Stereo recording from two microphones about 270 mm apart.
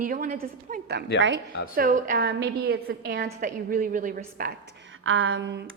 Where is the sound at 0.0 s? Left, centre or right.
Right.